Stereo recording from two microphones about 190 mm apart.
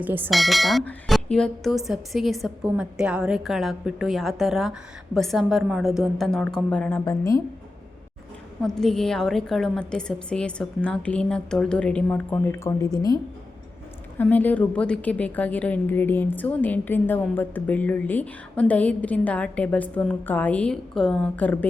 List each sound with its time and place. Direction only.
0.0 s speech: 10° right (ahead or behind)
0.3 s a woman's voice: centre (ahead or behind); by 7.4 s 15° left (ahead or behind)
8.6 s a woman's voice: centre (ahead or behind); by 13.1 s 20° left (ahead or behind)
14.2 s a woman's voice: 10° left (ahead or behind)